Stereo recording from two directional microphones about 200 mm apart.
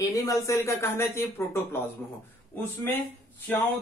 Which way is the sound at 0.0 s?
15° left (ahead or behind).